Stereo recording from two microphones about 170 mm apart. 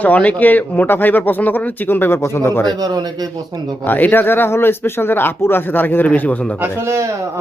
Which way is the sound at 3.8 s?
10° left (ahead or behind).